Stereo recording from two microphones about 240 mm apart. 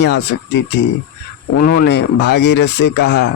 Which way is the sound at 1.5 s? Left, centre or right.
Left.